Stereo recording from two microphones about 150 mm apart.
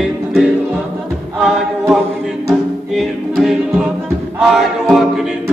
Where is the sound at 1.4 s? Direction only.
5° right (ahead or behind).